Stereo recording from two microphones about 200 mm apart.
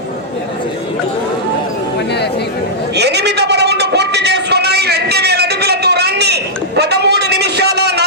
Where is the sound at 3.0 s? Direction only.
55° right (ahead or behind).